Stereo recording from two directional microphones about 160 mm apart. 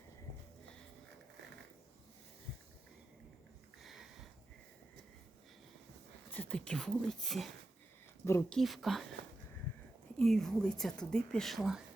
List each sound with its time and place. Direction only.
6.3 s speech: 10° left (ahead or behind)
8.2 s speech: 15° left (ahead or behind)
8.5 s speech: centre (ahead or behind)
10.2 s speech: centre (ahead or behind)